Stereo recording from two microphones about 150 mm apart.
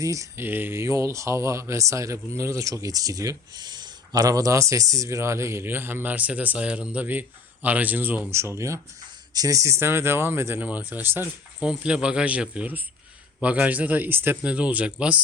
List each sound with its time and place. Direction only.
0.0 s speech: 20° right (ahead or behind)